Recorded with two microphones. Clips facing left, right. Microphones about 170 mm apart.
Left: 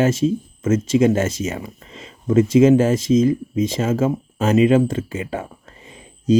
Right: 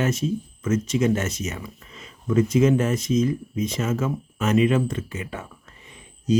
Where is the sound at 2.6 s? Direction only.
30° left (ahead or behind).